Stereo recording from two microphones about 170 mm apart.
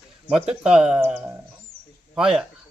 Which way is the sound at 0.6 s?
5° right (ahead or behind).